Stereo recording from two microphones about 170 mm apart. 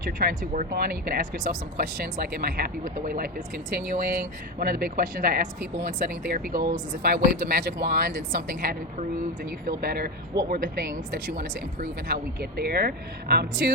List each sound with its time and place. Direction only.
0.3 s speech: 50° right (ahead or behind); by 13.5 s 70° right (ahead or behind)